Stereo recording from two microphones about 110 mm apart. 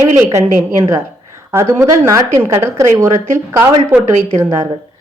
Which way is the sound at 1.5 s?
20° right (ahead or behind).